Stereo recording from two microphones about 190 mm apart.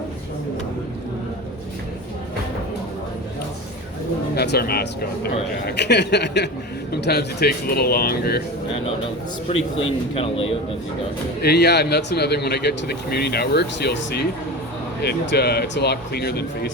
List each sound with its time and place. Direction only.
4.4 s speech: 55° left (ahead or behind)
10.2 s speech: 30° left (ahead or behind)
11.4 s speech: 60° left (ahead or behind)